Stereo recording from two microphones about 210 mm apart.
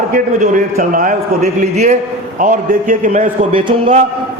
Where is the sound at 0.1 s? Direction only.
40° right (ahead or behind).